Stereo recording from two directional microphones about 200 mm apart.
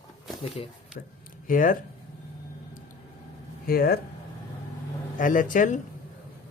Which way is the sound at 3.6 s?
50° left (ahead or behind).